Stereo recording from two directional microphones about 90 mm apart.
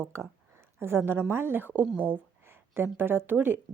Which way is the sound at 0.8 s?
25° right (ahead or behind).